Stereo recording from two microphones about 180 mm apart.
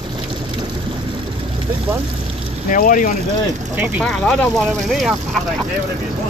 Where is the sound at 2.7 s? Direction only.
45° left (ahead or behind).